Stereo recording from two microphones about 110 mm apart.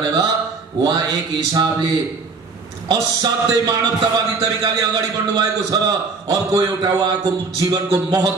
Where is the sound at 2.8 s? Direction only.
35° right (ahead or behind).